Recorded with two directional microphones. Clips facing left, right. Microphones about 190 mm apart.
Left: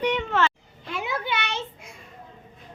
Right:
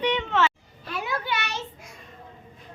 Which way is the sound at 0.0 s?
5° left (ahead or behind).